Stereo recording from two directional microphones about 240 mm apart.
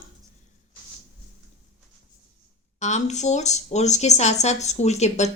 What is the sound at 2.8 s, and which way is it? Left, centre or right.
Speech, left.